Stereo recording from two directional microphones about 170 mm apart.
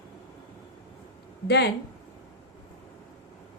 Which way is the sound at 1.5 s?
75° left (ahead or behind).